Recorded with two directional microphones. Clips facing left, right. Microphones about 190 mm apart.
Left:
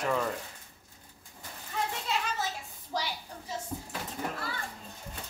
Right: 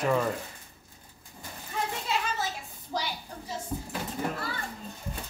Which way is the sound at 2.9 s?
5° right (ahead or behind).